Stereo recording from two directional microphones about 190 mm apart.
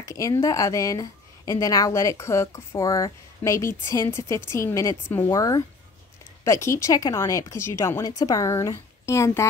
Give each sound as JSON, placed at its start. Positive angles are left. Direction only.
{"t": 0.0, "sound": "speech", "side_deg": 15}